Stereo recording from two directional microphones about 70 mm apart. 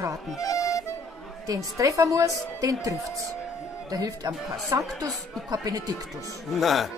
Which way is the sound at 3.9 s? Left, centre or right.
Right.